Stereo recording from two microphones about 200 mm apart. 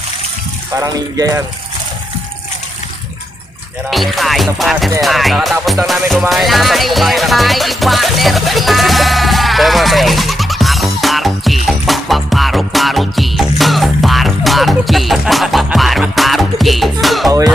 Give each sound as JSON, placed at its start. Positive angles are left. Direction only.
{"t": 0.7, "sound": "speech", "side_deg": -20}
{"t": 3.9, "sound": "music", "side_deg": 0}